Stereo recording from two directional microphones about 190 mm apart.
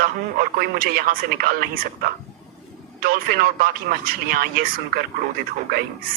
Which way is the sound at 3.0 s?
50° right (ahead or behind).